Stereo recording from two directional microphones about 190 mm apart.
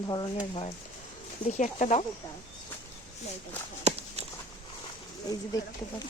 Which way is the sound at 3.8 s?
30° right (ahead or behind).